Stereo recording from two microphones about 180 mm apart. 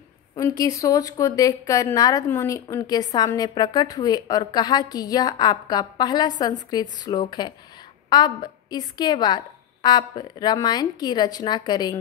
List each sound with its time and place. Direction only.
0.4 s a woman's voice: 20° left (ahead or behind)